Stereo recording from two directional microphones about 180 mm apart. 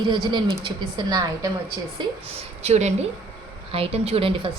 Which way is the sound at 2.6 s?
40° right (ahead or behind).